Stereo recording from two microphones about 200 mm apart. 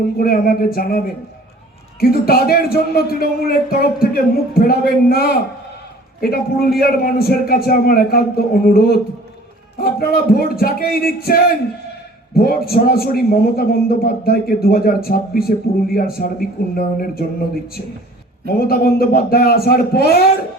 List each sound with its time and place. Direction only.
0.2 s a man's voice: 50° left (ahead or behind)
18.7 s a man's voice: 50° left (ahead or behind)